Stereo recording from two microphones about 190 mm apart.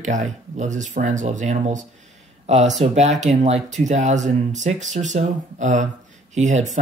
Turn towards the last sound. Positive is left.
turn(degrees=-40)  # may be behind; listen again after turning